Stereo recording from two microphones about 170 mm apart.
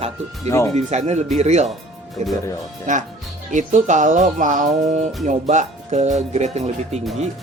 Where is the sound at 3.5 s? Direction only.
45° right (ahead or behind).